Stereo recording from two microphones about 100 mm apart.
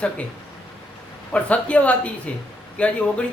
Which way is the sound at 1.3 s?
15° left (ahead or behind).